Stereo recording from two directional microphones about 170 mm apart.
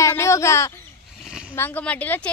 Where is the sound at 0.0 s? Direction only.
15° left (ahead or behind).